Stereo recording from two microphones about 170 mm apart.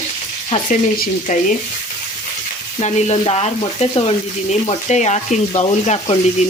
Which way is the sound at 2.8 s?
40° left (ahead or behind).